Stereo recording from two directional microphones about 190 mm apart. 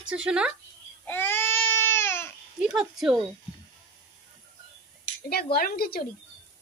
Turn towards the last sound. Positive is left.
turn(degrees=50)  # may be behind; listen again after turning